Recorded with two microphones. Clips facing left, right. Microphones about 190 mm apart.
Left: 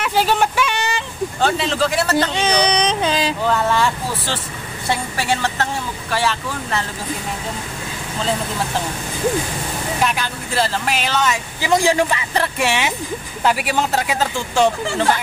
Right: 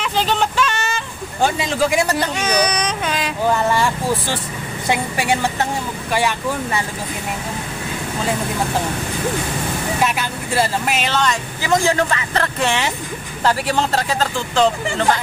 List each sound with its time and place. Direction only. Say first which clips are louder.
0.0 s vehicle: left 2 dB; 10° left (ahead or behind)
1.4 s speech: right 1 dB; 10° right (ahead or behind)
2.3 s speech: left 2 dB; 30° left (ahead or behind)
3.4 s speech: right 2 dB; 10° right (ahead or behind)
10.0 s speech: right 1 dB; 5° right (ahead or behind)
11.6 s speech: left 1 dB; 15° left (ahead or behind)